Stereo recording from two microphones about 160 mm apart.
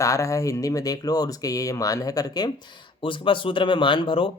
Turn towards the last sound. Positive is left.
turn(degrees=35)  # may be behind; listen again after turning